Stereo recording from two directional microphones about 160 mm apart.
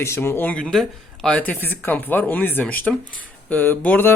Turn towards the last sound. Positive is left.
turn(degrees=10)  # may be behind; listen again after turning